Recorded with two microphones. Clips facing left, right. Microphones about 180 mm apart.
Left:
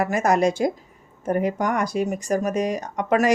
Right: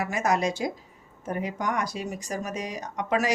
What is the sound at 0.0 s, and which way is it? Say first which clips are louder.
Speech: left 6 dB; 50° left (ahead or behind).